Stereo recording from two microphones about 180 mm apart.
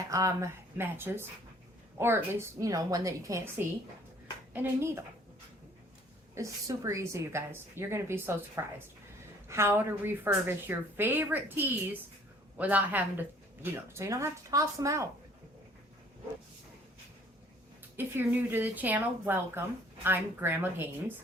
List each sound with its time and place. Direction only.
0.1 s a woman's voice: 15° right (ahead or behind)
4.5 s a woman's voice: 10° right (ahead or behind)
6.3 s a woman's voice: 15° right (ahead or behind)
17.9 s a woman's voice: 10° right (ahead or behind)